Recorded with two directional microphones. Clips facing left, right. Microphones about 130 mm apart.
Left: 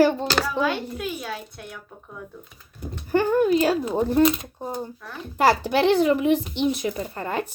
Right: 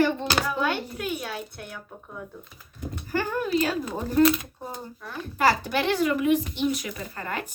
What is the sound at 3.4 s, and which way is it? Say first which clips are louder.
Speech: left 6 dB; 30° left (ahead or behind).